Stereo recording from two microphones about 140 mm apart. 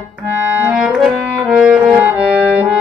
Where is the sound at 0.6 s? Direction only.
10° right (ahead or behind).